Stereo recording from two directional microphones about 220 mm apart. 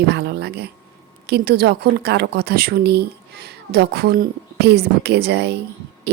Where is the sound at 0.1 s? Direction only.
50° right (ahead or behind).